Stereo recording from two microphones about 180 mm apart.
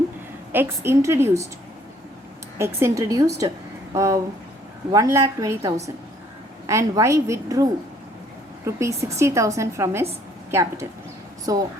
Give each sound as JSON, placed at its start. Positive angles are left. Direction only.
{"t": 0.5, "sound": "a woman's voice", "side_deg": -15}
{"t": 2.6, "sound": "a woman's voice", "side_deg": -15}